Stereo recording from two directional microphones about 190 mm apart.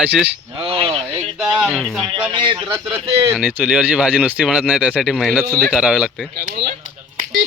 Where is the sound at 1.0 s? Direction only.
5° right (ahead or behind).